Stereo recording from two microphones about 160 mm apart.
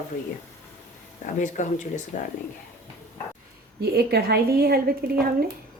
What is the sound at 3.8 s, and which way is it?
A woman's voice, 80° right.